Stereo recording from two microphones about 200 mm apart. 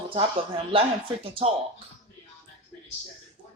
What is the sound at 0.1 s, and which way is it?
Speech, 25° right (ahead or behind).